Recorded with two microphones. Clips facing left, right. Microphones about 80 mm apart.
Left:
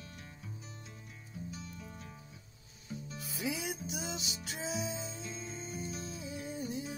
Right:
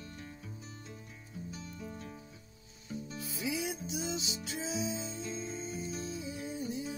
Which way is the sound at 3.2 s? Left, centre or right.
Left.